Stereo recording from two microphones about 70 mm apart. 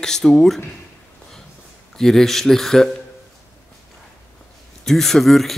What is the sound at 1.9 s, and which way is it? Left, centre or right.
Speech, centre.